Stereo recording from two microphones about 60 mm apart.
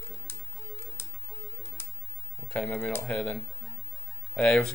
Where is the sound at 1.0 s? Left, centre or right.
Left.